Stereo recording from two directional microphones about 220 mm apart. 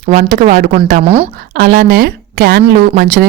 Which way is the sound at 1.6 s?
45° right (ahead or behind).